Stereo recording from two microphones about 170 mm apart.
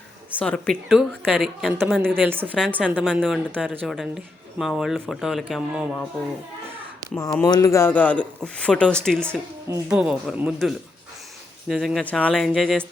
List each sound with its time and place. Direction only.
0.3 s speech: 5° left (ahead or behind)
2.2 s a woman's voice: 10° right (ahead or behind)
7.0 s a sound: 20° right (ahead or behind)
7.4 s speech: 20° left (ahead or behind); by 12.8 s centre (ahead or behind)